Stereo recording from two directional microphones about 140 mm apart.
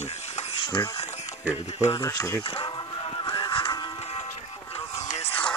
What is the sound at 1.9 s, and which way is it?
Speech, 25° left (ahead or behind).